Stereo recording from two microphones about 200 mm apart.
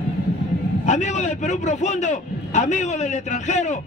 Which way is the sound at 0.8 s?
35° left (ahead or behind).